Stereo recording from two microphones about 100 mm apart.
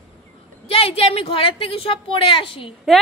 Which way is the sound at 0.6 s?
70° left (ahead or behind).